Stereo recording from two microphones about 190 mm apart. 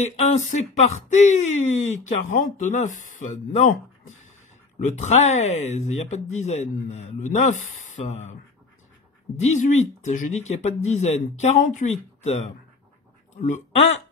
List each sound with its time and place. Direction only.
0.0 s speech: 35° left (ahead or behind)
4.8 s speech: 40° left (ahead or behind)
9.4 s speech: 35° left (ahead or behind)